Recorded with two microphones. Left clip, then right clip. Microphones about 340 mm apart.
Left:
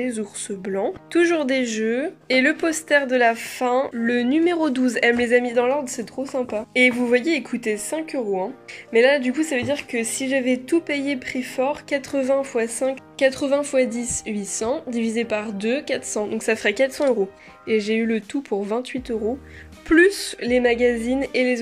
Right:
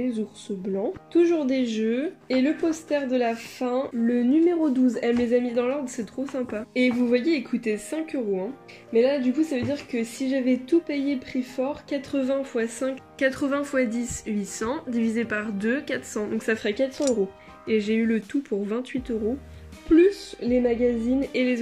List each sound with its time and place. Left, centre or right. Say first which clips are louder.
0.0 s a woman's voice: left 3 dB; left